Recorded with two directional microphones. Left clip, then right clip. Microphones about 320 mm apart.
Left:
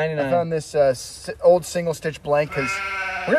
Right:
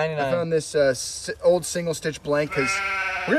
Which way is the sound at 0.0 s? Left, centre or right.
Centre.